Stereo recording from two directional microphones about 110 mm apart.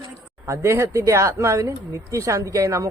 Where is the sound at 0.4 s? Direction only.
25° right (ahead or behind).